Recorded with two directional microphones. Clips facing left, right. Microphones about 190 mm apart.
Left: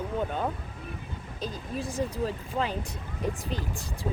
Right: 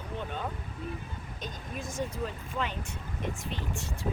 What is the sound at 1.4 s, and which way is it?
Speech, 35° left (ahead or behind).